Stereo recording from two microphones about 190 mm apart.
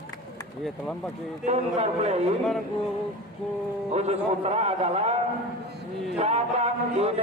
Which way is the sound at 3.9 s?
35° right (ahead or behind).